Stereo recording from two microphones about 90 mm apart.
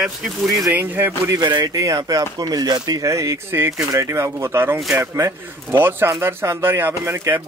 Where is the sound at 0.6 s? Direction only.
25° right (ahead or behind).